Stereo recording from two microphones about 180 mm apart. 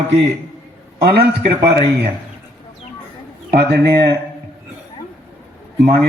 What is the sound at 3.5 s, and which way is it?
Speech, 60° right (ahead or behind).